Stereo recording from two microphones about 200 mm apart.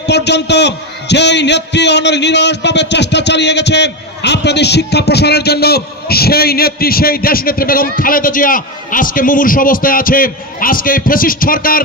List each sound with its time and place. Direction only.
0.1 s a man's voice: 60° left (ahead or behind)